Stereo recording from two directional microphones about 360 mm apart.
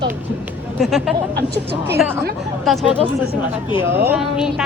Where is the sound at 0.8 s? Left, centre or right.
Centre.